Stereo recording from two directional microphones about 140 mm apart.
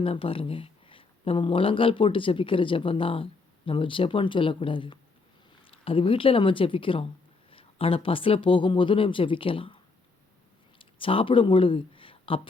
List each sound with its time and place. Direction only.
0.0 s speech: 40° left (ahead or behind)